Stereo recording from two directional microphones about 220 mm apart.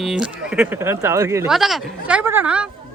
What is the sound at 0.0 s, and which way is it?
Speech, 5° right (ahead or behind).